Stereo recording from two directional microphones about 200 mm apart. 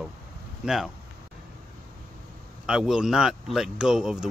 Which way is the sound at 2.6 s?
5° right (ahead or behind).